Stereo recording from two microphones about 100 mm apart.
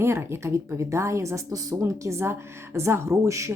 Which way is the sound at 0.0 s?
25° right (ahead or behind).